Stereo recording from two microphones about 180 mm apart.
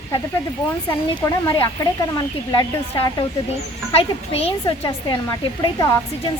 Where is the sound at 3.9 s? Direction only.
30° left (ahead or behind).